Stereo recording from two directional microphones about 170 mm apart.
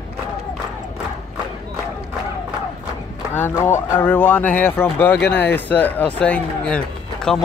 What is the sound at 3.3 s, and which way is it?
Speech, 15° left (ahead or behind).